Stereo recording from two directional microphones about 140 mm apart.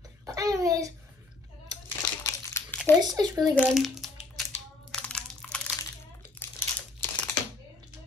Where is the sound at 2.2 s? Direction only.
20° left (ahead or behind).